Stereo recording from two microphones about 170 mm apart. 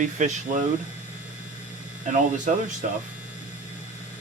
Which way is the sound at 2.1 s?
45° right (ahead or behind).